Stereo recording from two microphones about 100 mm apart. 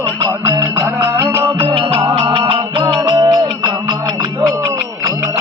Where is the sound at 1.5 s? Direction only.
60° right (ahead or behind).